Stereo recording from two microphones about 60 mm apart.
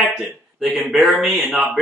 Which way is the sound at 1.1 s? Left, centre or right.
Right.